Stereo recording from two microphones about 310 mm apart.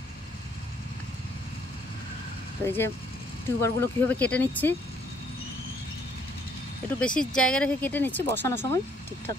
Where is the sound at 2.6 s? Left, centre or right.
Centre.